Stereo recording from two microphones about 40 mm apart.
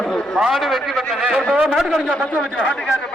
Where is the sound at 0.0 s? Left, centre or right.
Left.